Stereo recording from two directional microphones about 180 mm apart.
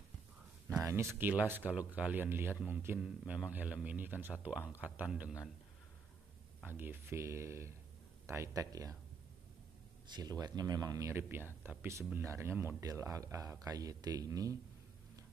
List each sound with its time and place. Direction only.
1.1 s speech: 10° right (ahead or behind)
6.8 s speech: 15° right (ahead or behind)
10.1 s speech: 20° right (ahead or behind)